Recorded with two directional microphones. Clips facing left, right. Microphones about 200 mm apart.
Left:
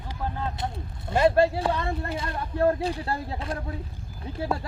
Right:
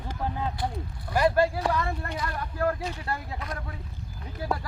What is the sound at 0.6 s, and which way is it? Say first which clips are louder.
Speech: right 1 dB; 25° left (ahead or behind).